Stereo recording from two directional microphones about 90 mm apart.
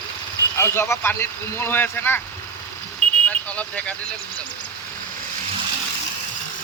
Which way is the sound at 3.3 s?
15° left (ahead or behind).